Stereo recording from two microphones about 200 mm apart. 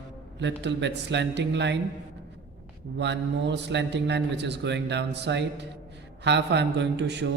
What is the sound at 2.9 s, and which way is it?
A man's voice, 60° right (ahead or behind).